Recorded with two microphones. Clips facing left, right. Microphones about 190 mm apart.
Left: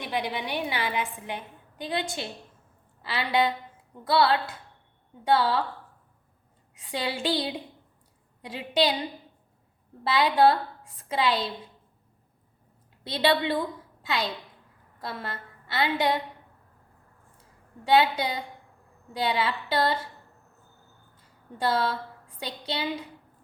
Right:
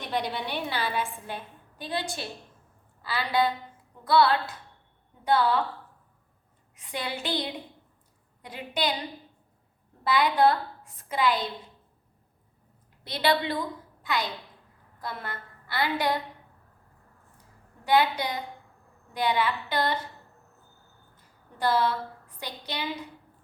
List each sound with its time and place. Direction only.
0.0 s a woman's voice: 10° left (ahead or behind); by 5.5 s 25° left (ahead or behind)
6.9 s a woman's voice: 30° left (ahead or behind)
10.0 s a woman's voice: 25° left (ahead or behind)
13.1 s a woman's voice: 25° left (ahead or behind)
17.8 s a woman's voice: 25° left (ahead or behind)
21.6 s a woman's voice: 25° left (ahead or behind)